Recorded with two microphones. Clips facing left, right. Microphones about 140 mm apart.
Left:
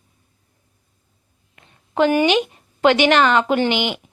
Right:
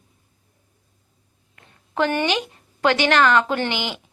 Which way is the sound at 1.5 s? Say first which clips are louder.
Left 4 dB; 20° left (ahead or behind).